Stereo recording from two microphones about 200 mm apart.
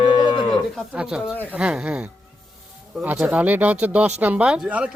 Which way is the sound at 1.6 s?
5° right (ahead or behind).